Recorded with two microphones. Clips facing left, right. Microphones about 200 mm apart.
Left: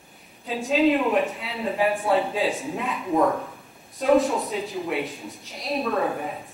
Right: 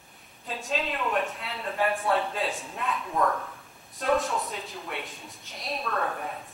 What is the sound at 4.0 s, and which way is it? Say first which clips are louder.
A woman's voice: left 7 dB; centre (ahead or behind).